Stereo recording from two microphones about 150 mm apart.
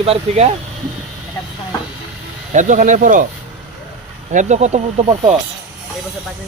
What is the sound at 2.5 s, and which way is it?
Speech, 60° right (ahead or behind).